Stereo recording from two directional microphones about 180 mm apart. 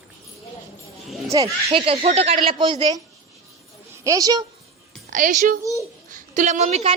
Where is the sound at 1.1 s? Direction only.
Centre (ahead or behind).